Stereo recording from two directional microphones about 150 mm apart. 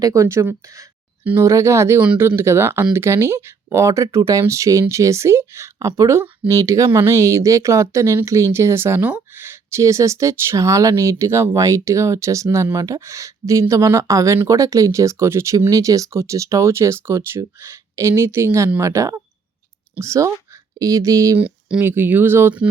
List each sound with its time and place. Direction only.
0.0 s speech: 20° right (ahead or behind)
21.3 s speech: 10° right (ahead or behind)